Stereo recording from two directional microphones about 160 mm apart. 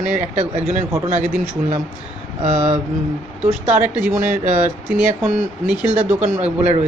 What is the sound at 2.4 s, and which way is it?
Speech, 45° right (ahead or behind).